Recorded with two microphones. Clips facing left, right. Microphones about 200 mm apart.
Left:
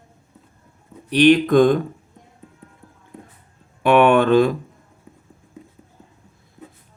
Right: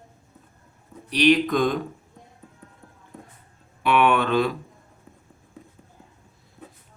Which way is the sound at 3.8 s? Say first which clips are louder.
Left 6 dB; 50° left (ahead or behind).